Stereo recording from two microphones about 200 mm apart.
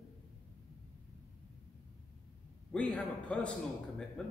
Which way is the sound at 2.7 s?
5° left (ahead or behind).